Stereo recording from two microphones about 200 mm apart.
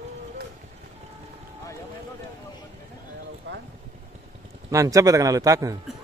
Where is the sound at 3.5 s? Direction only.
65° right (ahead or behind).